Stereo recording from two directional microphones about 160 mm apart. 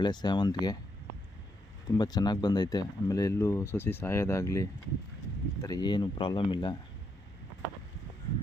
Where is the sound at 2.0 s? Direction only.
25° left (ahead or behind).